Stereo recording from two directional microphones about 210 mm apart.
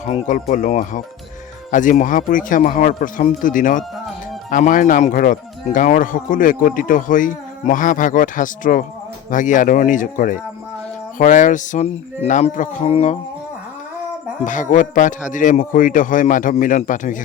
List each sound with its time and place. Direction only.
0.0 s speech: 35° left (ahead or behind)
14.4 s speech: 40° left (ahead or behind)